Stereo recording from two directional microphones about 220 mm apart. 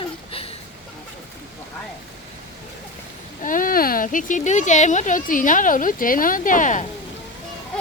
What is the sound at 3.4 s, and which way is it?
Speech, 40° left (ahead or behind).